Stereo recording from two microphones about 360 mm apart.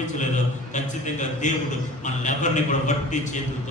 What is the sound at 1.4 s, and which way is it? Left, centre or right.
A man's voice, left.